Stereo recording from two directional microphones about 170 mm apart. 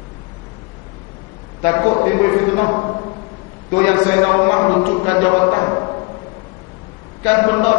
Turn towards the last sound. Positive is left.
turn(degrees=20)  # may be behind; listen again after turning